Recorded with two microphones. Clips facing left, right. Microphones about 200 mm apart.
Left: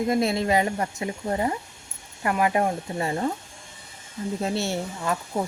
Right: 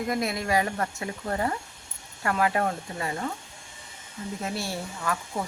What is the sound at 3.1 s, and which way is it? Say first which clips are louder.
Speech: left 6 dB; 30° left (ahead or behind).